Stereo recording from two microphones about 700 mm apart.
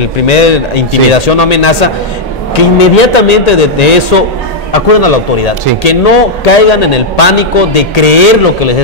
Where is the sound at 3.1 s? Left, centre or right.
Left.